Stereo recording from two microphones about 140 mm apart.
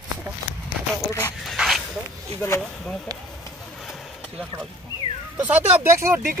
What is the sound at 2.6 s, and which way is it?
Speech, 5° left (ahead or behind).